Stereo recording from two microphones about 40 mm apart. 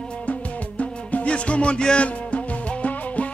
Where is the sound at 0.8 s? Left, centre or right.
Left.